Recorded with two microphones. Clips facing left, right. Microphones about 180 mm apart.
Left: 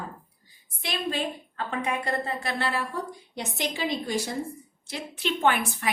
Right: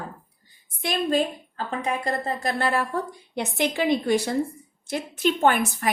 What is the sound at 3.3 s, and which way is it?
A woman's voice, 60° right (ahead or behind).